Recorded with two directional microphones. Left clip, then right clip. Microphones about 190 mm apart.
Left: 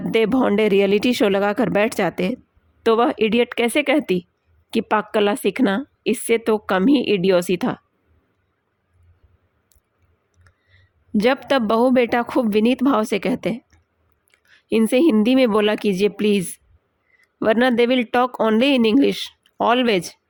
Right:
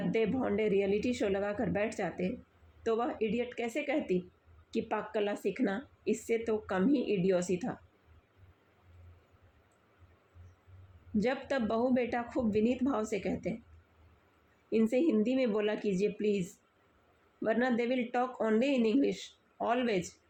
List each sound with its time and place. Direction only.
0.1 s a woman's voice: 45° left (ahead or behind)
11.2 s a woman's voice: 45° left (ahead or behind)
14.7 s a woman's voice: 45° left (ahead or behind)